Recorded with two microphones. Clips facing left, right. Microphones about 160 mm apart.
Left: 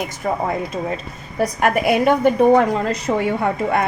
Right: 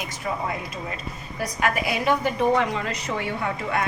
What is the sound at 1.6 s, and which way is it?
A woman's voice, 55° left (ahead or behind).